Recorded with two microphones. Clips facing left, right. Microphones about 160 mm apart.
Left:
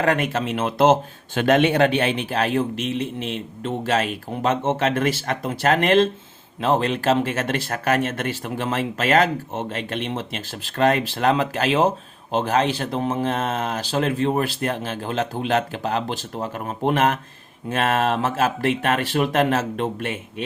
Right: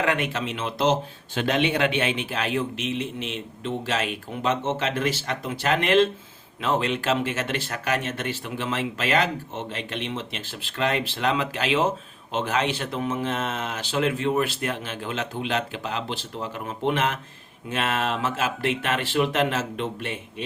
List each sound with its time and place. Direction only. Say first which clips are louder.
0.0 s speech: left 4 dB; 40° left (ahead or behind)